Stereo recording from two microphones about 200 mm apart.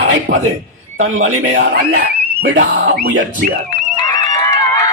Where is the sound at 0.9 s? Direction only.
80° right.